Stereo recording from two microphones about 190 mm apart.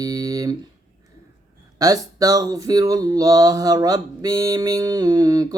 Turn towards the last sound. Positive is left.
turn(degrees=-20)  # may be behind; listen again after turning